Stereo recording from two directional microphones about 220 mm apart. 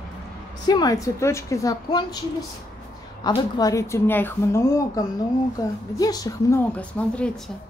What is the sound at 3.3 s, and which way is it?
A woman's voice, 15° left (ahead or behind).